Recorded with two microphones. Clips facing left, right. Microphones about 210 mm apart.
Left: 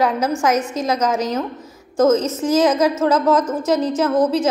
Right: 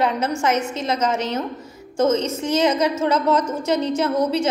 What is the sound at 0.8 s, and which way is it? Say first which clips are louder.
Speech: left 4 dB; 25° right (ahead or behind).